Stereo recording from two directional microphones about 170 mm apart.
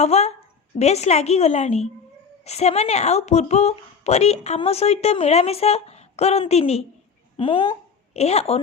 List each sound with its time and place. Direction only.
0.0 s a woman's voice: 40° left (ahead or behind)